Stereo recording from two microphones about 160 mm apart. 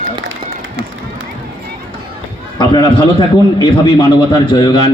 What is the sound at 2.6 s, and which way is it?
A man's voice, 30° left (ahead or behind).